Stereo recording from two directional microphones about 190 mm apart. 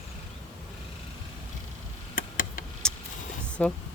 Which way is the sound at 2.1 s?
50° left (ahead or behind).